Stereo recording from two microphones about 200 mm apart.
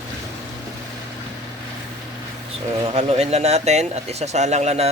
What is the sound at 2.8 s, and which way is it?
Speech, 30° right (ahead or behind).